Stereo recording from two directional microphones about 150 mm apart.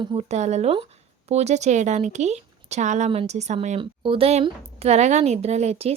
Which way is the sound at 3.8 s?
35° right (ahead or behind).